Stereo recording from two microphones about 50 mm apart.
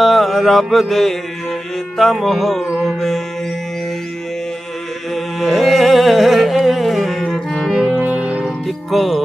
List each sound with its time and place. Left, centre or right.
0.0 s mantra: centre
2.0 s music: centre
5.1 s music: centre
7.2 s saxophone: centre
8.0 s music: right
8.6 s music: centre